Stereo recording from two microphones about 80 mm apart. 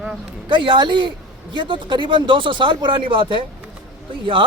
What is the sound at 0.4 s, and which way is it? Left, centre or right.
Speech, right.